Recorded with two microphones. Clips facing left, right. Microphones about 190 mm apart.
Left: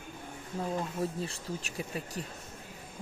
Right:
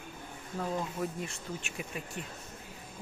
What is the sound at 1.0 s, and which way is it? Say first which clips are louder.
Speech: left 2 dB; 30° left (ahead or behind).